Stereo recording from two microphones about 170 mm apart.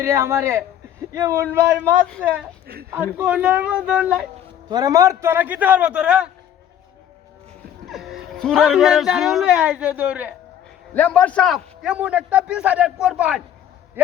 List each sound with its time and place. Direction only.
0.0 s a man's voice: 15° right (ahead or behind)
4.7 s a man's voice: 20° right (ahead or behind)
7.9 s speech: centre (ahead or behind)
10.9 s a man's voice: 10° left (ahead or behind); by 13.4 s 5° right (ahead or behind)